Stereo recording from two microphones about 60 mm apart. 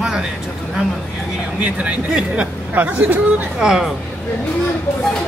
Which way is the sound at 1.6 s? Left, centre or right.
Right.